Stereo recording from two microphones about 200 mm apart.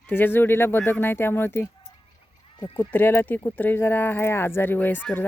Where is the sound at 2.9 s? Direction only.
10° left (ahead or behind).